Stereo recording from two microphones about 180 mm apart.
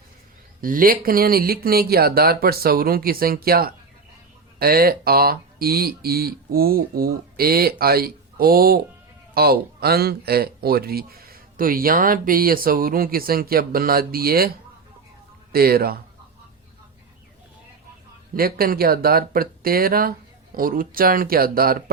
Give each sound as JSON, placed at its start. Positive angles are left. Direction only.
{"t": 0.6, "sound": "speech", "side_deg": -50}
{"t": 15.5, "sound": "speech", "side_deg": -55}
{"t": 18.3, "sound": "speech", "side_deg": -55}